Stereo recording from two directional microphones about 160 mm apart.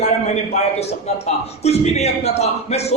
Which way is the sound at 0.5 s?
40° left (ahead or behind).